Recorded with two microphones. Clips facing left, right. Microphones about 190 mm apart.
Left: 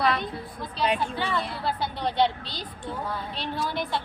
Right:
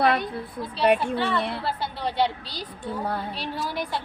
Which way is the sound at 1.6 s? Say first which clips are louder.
Even; 5° right (ahead or behind).